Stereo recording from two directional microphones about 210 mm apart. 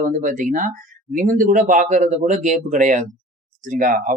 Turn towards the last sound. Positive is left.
turn(degrees=-40)  # may be behind; listen again after turning